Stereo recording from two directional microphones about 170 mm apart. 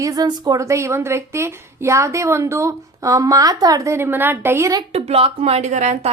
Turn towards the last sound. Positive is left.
turn(degrees=-45)  # may be behind; listen again after turning